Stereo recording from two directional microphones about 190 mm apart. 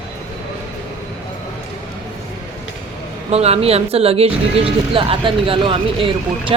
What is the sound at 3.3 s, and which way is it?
Speech, 35° right (ahead or behind).